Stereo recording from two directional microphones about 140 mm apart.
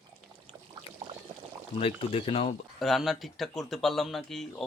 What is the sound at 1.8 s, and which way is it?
Speech, 40° left (ahead or behind).